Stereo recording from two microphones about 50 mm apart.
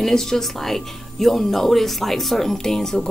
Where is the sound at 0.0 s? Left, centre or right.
Centre.